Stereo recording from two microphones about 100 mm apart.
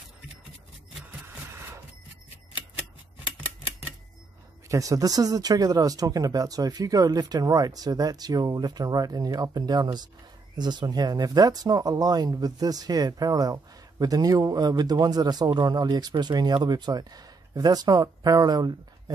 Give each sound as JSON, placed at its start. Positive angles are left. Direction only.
{"t": 4.6, "sound": "speech", "side_deg": -35}